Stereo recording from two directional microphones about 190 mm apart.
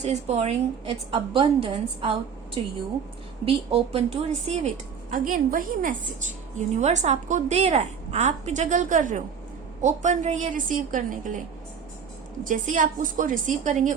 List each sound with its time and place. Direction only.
0.0 s a woman's voice: 35° right (ahead or behind)
3.4 s a woman's voice: 30° right (ahead or behind)
5.1 s a woman's voice: 45° right (ahead or behind)
12.5 s a woman's voice: 45° right (ahead or behind)